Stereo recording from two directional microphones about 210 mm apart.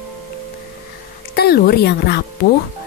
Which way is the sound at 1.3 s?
50° left (ahead or behind).